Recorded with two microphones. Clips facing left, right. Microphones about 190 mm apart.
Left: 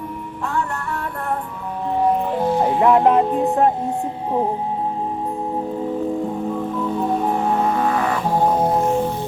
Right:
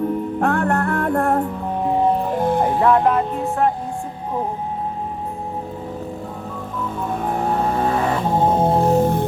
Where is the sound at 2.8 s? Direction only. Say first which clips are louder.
Left 3 dB; 20° left (ahead or behind).